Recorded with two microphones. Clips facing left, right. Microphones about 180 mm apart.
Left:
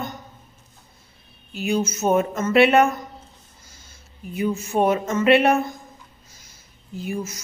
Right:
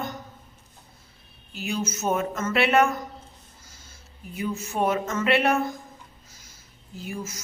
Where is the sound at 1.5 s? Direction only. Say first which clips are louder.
Left 6 dB; 15° left (ahead or behind).